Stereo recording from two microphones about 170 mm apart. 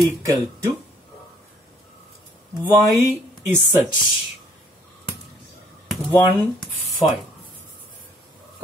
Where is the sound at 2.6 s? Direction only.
15° right (ahead or behind).